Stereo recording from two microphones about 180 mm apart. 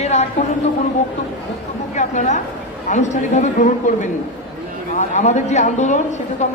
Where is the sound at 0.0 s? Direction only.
40° left (ahead or behind).